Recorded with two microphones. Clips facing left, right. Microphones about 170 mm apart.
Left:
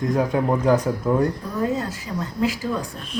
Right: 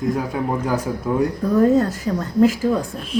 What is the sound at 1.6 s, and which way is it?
Speech, 50° right (ahead or behind).